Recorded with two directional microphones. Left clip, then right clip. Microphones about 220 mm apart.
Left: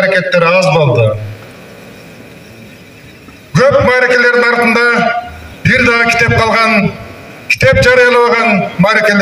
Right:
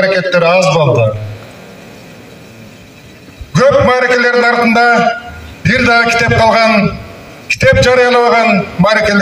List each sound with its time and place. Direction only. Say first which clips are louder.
0.0 s a man's voice: even; 20° left (ahead or behind)
3.5 s a man's voice: even; 20° left (ahead or behind)